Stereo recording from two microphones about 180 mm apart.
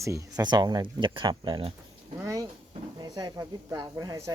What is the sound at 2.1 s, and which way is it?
Speech, 20° right (ahead or behind).